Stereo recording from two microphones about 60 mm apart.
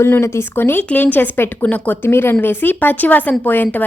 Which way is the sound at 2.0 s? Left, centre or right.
Left.